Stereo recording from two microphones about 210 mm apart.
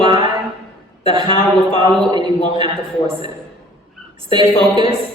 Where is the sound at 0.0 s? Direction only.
25° right (ahead or behind).